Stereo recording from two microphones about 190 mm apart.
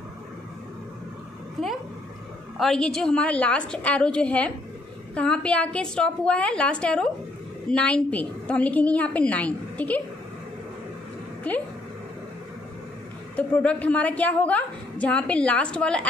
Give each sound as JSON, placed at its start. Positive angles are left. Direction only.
{"t": 2.5, "sound": "a woman's voice", "side_deg": 0}
{"t": 13.4, "sound": "a woman's voice", "side_deg": 5}